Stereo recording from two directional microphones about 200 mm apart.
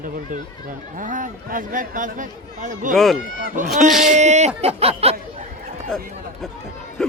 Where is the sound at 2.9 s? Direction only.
Centre (ahead or behind).